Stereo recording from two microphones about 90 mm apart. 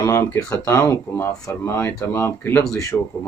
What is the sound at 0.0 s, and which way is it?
Speech, 35° left (ahead or behind).